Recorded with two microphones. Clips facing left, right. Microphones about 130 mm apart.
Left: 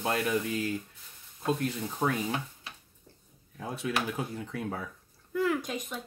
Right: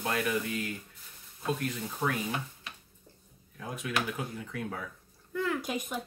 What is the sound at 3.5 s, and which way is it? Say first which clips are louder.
Speech: left 2 dB; 30° left (ahead or behind).